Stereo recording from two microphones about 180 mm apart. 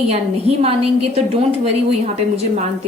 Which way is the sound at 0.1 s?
35° right (ahead or behind).